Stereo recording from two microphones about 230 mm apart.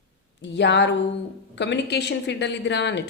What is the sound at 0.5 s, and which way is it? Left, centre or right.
A woman's voice, left.